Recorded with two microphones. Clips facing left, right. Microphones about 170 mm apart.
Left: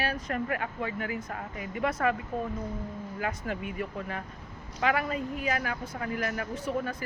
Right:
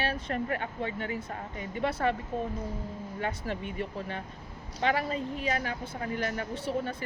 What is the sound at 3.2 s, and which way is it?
Speech, 30° right (ahead or behind).